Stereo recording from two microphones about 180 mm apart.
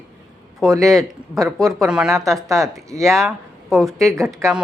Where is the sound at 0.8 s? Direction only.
Centre (ahead or behind).